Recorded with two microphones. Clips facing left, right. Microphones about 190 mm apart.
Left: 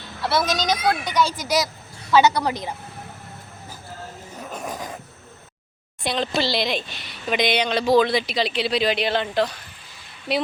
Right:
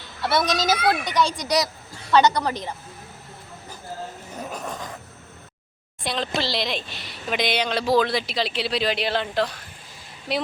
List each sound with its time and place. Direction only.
0.2 s a woman's voice: centre (ahead or behind)
4.6 s a sound: 15° left (ahead or behind)
6.0 s speech: centre (ahead or behind)